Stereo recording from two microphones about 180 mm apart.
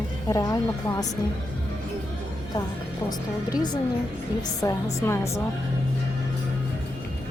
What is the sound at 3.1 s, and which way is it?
Speech, 25° left (ahead or behind).